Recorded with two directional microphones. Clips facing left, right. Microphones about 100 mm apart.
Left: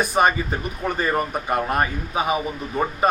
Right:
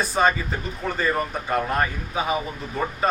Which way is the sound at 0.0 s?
15° left (ahead or behind).